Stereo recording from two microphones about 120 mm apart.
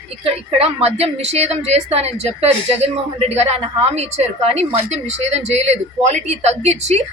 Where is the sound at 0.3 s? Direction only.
55° right (ahead or behind).